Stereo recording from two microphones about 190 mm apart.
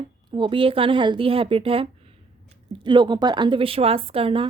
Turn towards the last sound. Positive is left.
turn(degrees=-30)  # may be behind; listen again after turning